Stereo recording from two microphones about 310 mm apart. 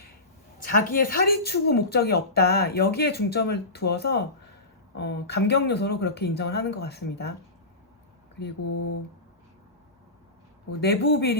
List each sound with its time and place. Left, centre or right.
0.6 s speech: left
8.6 s mantra: left
10.8 s speech: left